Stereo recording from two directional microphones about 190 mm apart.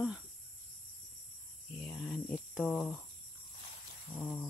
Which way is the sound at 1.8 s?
5° left (ahead or behind).